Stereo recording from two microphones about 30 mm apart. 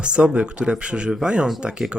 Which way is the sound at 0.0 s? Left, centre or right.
Right.